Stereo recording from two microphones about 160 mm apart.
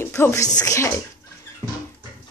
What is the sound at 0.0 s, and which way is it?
Speech, 15° left (ahead or behind).